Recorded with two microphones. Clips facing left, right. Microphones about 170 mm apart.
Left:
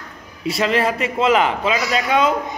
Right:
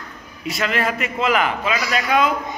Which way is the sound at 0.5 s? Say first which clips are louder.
Left 4 dB; 30° left (ahead or behind).